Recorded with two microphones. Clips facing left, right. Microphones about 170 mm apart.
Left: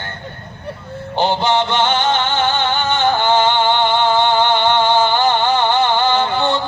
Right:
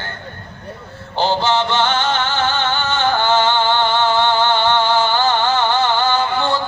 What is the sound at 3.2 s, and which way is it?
Music, 20° left (ahead or behind).